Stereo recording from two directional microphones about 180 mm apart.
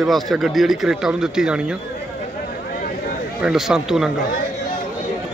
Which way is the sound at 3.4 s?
Centre (ahead or behind).